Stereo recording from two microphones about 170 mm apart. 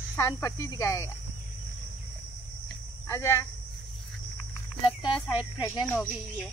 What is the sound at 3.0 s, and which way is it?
Speech, 15° left (ahead or behind).